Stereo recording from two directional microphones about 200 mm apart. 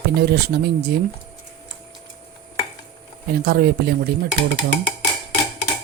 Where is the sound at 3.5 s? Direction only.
50° right (ahead or behind).